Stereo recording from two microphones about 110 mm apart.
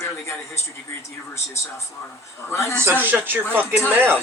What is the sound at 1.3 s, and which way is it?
Speech, 25° left (ahead or behind).